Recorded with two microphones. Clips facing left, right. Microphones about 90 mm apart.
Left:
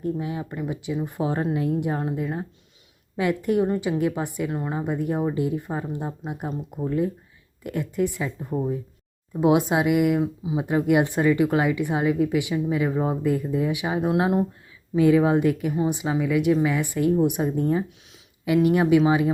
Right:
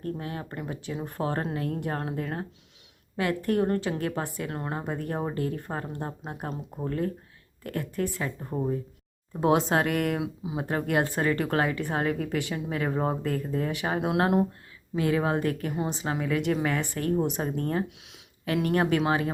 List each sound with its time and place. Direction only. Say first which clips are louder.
0.0 s speech: left 6 dB; 15° left (ahead or behind)
0.5 s speech: left 5 dB; centre (ahead or behind)
1.0 s speech: left 3 dB; 15° left (ahead or behind)
4.4 s speech: left 5 dB; 5° left (ahead or behind)
4.9 s speech: left 7 dB; 15° left (ahead or behind)
8.4 s speech: left 4 dB; 5° right (ahead or behind)
9.4 s speech: left 3 dB; 10° left (ahead or behind)
10.6 s speech: left 6 dB; 15° left (ahead or behind); by 14.4 s centre (ahead or behind)
15.2 s speech: left 6 dB; 15° left (ahead or behind)